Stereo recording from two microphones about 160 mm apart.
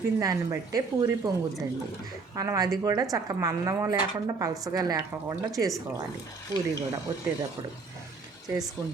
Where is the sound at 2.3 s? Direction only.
20° right (ahead or behind).